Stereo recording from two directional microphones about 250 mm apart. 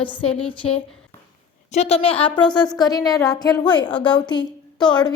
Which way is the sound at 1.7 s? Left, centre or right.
Left.